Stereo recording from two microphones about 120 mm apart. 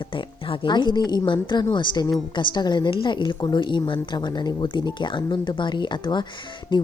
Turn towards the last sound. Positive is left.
turn(degrees=40)  # may be behind; listen again after turning